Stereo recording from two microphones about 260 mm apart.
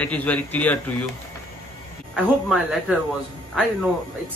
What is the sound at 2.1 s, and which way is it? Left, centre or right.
Speech, centre.